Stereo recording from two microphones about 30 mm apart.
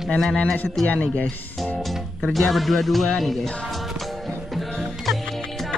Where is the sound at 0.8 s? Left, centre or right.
Left.